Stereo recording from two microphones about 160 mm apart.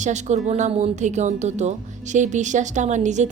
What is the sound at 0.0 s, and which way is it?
A woman's voice, 45° right (ahead or behind).